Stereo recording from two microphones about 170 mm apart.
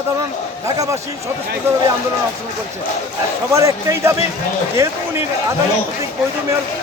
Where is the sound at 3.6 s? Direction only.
15° right (ahead or behind).